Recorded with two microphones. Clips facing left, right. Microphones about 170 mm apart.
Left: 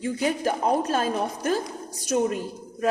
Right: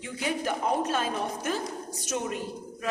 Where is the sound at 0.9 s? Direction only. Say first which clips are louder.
Left 4 dB; 40° left (ahead or behind).